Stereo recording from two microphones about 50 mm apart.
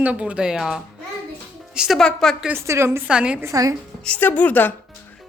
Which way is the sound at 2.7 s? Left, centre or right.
Right.